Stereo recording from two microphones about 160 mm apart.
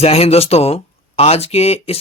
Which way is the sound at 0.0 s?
40° left (ahead or behind).